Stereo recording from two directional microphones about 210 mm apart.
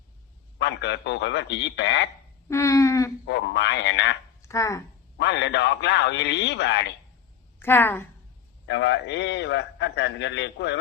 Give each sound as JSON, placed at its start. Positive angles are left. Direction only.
{"t": 0.6, "sound": "a man's voice", "side_deg": 55}
{"t": 2.5, "sound": "a sound", "side_deg": 15}
{"t": 3.2, "sound": "a man's voice", "side_deg": 55}
{"t": 4.4, "sound": "speech", "side_deg": 15}
{"t": 5.1, "sound": "a man's voice", "side_deg": 55}
{"t": 7.6, "sound": "a sound", "side_deg": 10}
{"t": 8.6, "sound": "a man's voice", "side_deg": 55}